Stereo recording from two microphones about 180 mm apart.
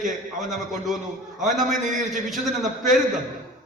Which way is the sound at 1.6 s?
45° right (ahead or behind).